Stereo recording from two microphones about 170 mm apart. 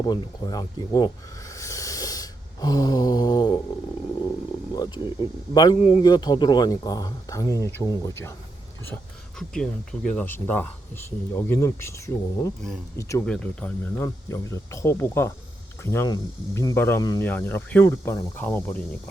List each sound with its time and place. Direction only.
0.0 s speech: 25° left (ahead or behind)
4.7 s speech: 25° left (ahead or behind)
9.4 s speech: 5° left (ahead or behind)
13.2 s speech: 5° left (ahead or behind)